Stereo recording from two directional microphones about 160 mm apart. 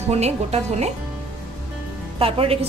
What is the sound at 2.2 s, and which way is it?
Speech, 35° right (ahead or behind).